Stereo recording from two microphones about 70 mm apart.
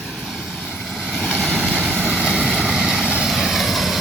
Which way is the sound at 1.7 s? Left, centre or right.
Centre.